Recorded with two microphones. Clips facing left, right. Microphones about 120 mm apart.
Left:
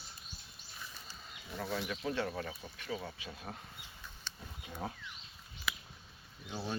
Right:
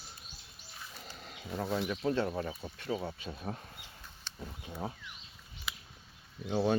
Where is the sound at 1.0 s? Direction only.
70° right (ahead or behind).